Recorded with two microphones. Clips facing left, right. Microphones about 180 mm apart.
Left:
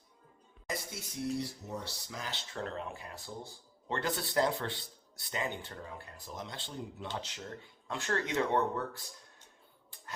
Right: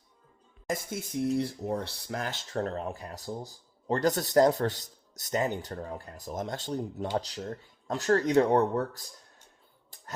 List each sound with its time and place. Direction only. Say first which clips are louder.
0.7 s speech: right 8 dB; 50° right (ahead or behind)